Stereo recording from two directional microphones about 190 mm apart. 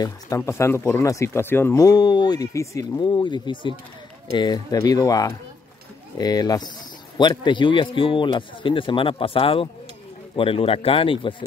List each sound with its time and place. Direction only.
0.4 s speech: 15° left (ahead or behind); by 11.3 s 30° left (ahead or behind)